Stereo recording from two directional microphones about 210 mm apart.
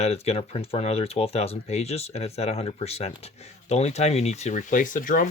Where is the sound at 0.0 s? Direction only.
30° left (ahead or behind).